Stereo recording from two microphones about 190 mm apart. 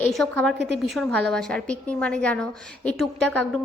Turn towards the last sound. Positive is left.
turn(degrees=5)  # may be behind; listen again after turning